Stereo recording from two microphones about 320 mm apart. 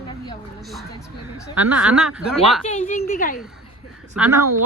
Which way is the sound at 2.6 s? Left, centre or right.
Left.